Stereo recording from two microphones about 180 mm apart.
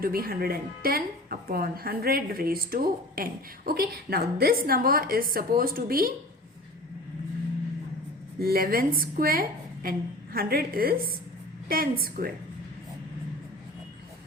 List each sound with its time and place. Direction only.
0.0 s a woman's voice: 55° right (ahead or behind)
8.4 s a woman's voice: 55° right (ahead or behind)